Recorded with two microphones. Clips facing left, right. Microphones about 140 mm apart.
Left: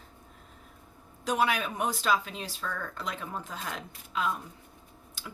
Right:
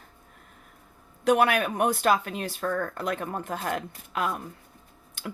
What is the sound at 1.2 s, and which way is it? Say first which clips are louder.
Speech: right 6 dB; 60° right (ahead or behind).